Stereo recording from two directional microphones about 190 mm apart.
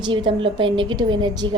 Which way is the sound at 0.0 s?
25° right (ahead or behind).